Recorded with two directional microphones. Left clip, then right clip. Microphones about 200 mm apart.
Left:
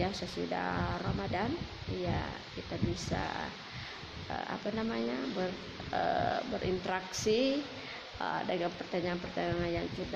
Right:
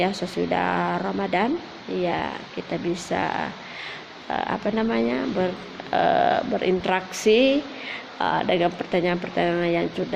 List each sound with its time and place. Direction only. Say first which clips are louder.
0.2 s speech: right 12 dB; 45° right (ahead or behind)